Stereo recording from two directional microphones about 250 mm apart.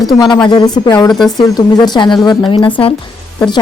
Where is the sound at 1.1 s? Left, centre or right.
Centre.